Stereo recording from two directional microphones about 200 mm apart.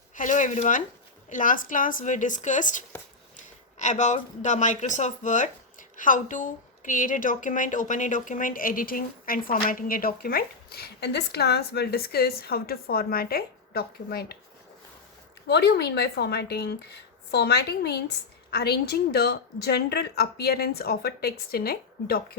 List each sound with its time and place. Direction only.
0.2 s a woman's voice: 40° left (ahead or behind)
15.4 s speech: 55° left (ahead or behind)